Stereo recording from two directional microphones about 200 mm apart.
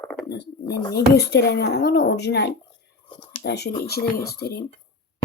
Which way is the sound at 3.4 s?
55° left (ahead or behind).